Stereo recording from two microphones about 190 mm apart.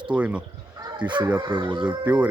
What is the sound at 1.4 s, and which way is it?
Speech, 25° right (ahead or behind).